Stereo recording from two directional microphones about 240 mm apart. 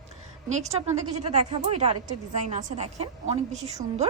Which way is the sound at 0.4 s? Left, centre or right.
Right.